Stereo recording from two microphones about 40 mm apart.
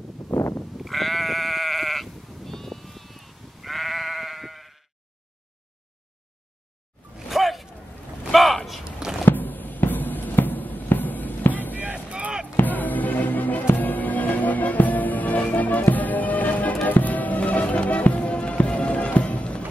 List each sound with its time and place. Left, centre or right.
0.7 s sheep: centre
7.2 s bow-wow: centre
8.3 s a sound: centre
9.3 s music: left
11.8 s a sound: right
12.5 s music: left